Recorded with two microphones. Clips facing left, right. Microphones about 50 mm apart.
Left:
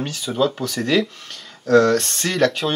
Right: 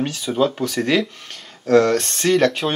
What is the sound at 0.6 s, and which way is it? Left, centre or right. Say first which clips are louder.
Speech: right 1 dB; right.